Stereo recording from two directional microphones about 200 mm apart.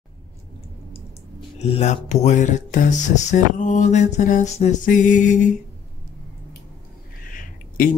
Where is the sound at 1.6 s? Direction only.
35° left (ahead or behind).